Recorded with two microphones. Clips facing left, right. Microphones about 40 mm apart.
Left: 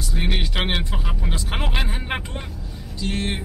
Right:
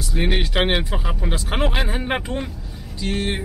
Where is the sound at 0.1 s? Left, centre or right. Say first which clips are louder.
Right 5 dB; centre.